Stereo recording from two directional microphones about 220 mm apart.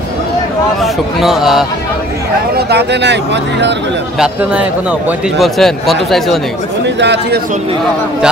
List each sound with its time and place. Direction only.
0.7 s a man's voice: centre (ahead or behind)
2.5 s speech: 50° right (ahead or behind)
4.2 s a man's voice: 5° right (ahead or behind)
7.0 s speech: 50° right (ahead or behind)